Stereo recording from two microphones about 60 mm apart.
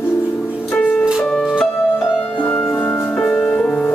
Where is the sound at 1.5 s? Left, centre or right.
Centre.